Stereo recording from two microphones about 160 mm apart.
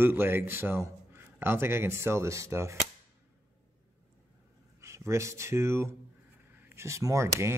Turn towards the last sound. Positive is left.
turn(degrees=-15)  # may be behind; listen again after turning